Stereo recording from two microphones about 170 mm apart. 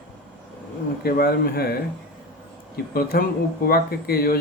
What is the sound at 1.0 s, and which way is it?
Speech, 65° left (ahead or behind).